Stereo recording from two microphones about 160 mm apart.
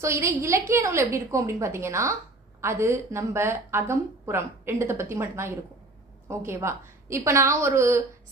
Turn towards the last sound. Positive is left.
turn(degrees=-15)  # may be behind; listen again after turning